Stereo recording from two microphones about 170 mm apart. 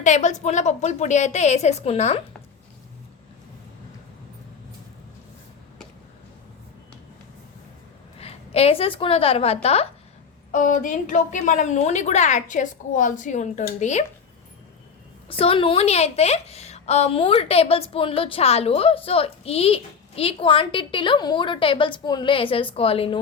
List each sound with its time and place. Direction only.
0.0 s a woman's voice: 45° left (ahead or behind)
8.2 s a woman's voice: 35° left (ahead or behind)
10.5 s a woman's voice: 50° left (ahead or behind)
15.3 s a woman's voice: 35° left (ahead or behind)